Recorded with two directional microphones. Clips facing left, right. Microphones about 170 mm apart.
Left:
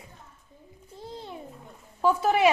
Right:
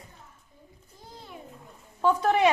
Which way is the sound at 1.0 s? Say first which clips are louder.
Left 8 dB; 25° left (ahead or behind).